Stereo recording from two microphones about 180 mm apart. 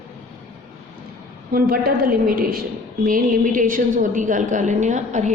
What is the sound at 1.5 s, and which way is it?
A woman's voice, 55° right (ahead or behind).